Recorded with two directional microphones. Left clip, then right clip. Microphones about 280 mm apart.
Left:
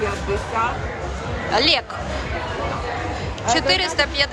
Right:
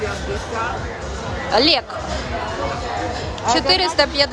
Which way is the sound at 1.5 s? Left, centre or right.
Centre.